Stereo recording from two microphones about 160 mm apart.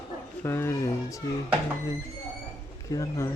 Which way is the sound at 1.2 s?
20° left (ahead or behind).